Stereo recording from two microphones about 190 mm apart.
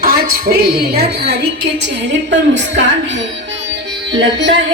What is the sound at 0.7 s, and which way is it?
A woman's voice, 55° right (ahead or behind).